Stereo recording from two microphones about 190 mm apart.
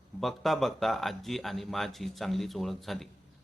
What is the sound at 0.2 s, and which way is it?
Speech, centre (ahead or behind).